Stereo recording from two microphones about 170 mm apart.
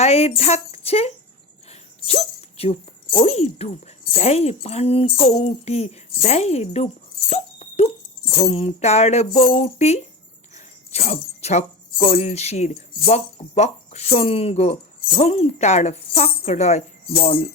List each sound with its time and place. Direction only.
0.0 s speech: 35° left (ahead or behind)
8.4 s music: 35° left (ahead or behind)
10.5 s speech: 40° left (ahead or behind)
17.2 s music: 35° left (ahead or behind)